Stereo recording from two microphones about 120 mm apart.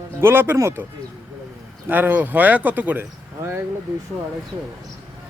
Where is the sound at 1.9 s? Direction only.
15° right (ahead or behind).